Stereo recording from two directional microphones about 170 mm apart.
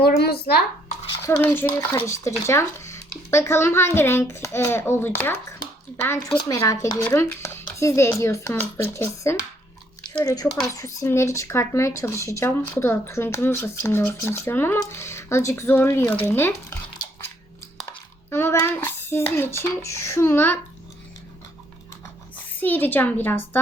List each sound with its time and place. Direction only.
0.0 s speech: 65° left (ahead or behind)
1.2 s speech: 15° left (ahead or behind)
18.3 s child singing: 15° left (ahead or behind)
19.4 s speech: 15° left (ahead or behind)
22.6 s speech: 10° left (ahead or behind)